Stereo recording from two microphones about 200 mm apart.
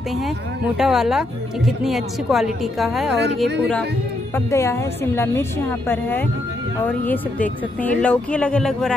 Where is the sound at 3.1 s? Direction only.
60° right (ahead or behind).